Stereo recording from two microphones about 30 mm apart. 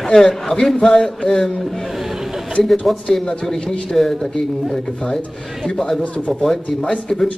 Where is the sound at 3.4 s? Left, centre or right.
Centre.